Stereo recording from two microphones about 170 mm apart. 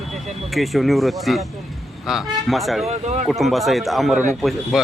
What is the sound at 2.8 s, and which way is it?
Speech, 40° right (ahead or behind).